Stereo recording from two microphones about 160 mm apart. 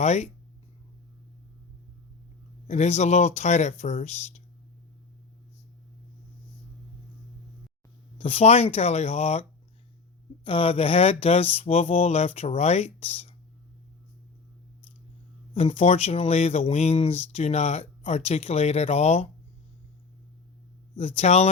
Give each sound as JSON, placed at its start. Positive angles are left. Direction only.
{"t": 0.0, "sound": "speech", "side_deg": 45}
{"t": 2.6, "sound": "speech", "side_deg": 45}
{"t": 8.2, "sound": "speech", "side_deg": 40}
{"t": 10.4, "sound": "speech", "side_deg": 35}
{"t": 15.5, "sound": "speech", "side_deg": 40}
{"t": 20.9, "sound": "speech", "side_deg": 40}